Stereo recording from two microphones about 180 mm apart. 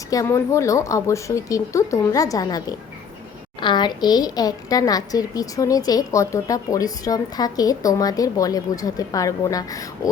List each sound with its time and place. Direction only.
0.1 s a woman's voice: 15° left (ahead or behind)